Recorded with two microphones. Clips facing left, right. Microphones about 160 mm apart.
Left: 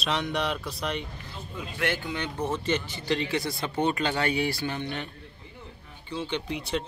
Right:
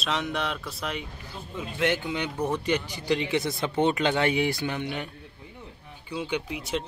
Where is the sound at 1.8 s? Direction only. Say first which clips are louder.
Right 3 dB; 20° right (ahead or behind).